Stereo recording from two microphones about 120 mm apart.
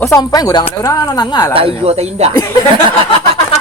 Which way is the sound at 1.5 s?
55° right (ahead or behind).